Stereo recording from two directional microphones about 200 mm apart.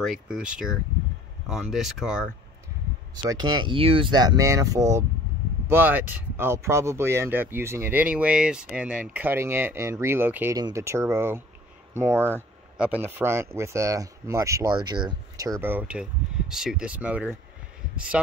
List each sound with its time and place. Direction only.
0.0 s speech: centre (ahead or behind)
3.2 s speech: 20° right (ahead or behind)
15.6 s speech: 10° right (ahead or behind)